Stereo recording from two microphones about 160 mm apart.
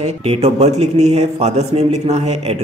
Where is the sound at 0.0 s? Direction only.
40° right (ahead or behind).